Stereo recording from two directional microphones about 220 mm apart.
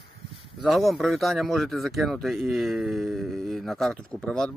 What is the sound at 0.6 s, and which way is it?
Speech, centre (ahead or behind).